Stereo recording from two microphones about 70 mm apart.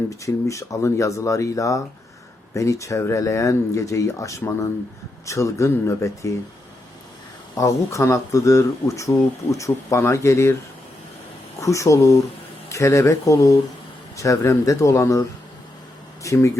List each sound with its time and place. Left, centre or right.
0.1 s speech: left
7.5 s speech: left
11.6 s speech: left